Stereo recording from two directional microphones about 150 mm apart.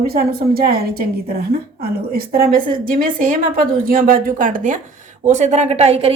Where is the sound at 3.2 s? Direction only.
70° right (ahead or behind); by 6.1 s 45° right (ahead or behind).